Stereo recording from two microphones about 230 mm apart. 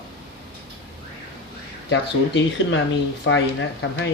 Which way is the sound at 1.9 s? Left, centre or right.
Left.